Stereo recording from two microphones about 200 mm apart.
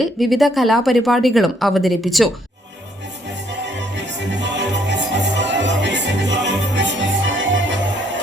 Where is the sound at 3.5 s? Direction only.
60° right (ahead or behind).